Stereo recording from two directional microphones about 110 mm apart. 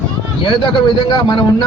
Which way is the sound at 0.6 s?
50° left (ahead or behind).